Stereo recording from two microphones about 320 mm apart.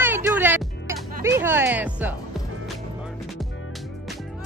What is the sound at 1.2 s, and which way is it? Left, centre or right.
Speech, centre.